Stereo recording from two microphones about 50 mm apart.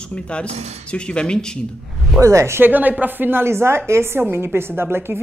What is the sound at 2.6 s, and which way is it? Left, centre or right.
Speech, right.